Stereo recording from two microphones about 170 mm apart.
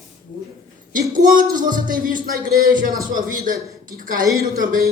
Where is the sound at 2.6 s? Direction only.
55° right (ahead or behind).